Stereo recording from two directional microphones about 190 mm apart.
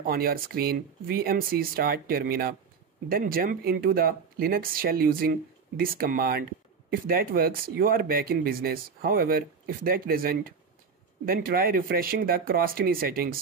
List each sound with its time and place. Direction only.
0.0 s speech: 50° right (ahead or behind)